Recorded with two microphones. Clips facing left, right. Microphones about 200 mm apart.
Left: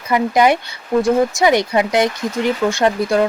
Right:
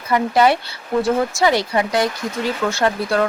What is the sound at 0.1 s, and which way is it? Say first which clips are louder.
Speech: left 1 dB; 15° left (ahead or behind).